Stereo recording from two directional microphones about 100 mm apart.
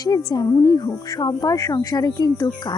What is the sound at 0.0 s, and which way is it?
A woman's voice, 40° left (ahead or behind).